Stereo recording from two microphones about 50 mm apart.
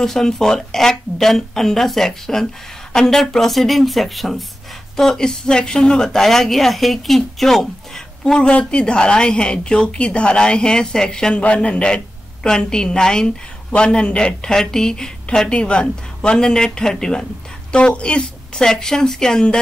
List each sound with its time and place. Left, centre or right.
0.0 s a woman's voice: centre
8.5 s a woman's voice: centre
11.4 s a man's voice: left